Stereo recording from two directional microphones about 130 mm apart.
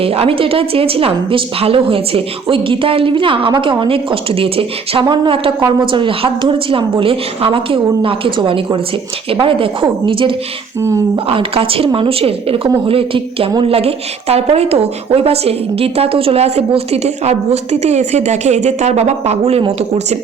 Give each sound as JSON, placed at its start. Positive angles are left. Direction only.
{"t": 0.0, "sound": "a woman's voice", "side_deg": -45}
{"t": 10.8, "sound": "speech", "side_deg": -20}
{"t": 11.3, "sound": "a woman's voice", "side_deg": -45}